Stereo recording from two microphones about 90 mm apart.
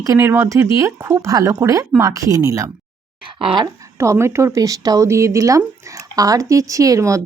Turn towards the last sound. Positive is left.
turn(degrees=-35)  # may be behind; listen again after turning